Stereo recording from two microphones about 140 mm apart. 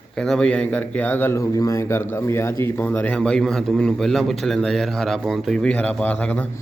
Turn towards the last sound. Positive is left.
turn(degrees=10)  # may be behind; listen again after turning